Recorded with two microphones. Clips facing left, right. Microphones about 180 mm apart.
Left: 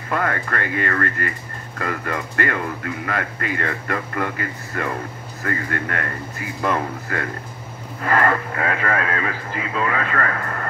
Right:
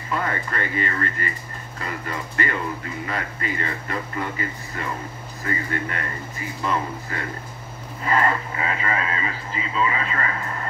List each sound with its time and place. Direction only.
0.1 s speech: 60° left (ahead or behind)